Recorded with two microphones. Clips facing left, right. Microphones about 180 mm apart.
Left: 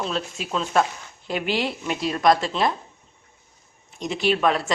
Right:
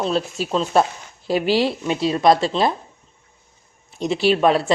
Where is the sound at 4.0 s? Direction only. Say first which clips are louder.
Right 5 dB; 35° right (ahead or behind).